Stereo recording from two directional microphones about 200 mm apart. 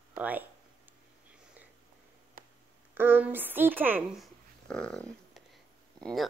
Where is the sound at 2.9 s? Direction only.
10° right (ahead or behind).